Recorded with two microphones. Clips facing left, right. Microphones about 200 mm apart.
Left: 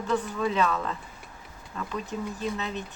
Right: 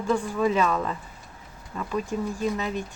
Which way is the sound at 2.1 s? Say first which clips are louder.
Right 4 dB; 55° right (ahead or behind).